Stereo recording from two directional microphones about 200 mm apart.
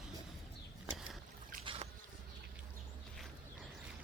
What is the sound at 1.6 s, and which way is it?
Boat, 30° right (ahead or behind).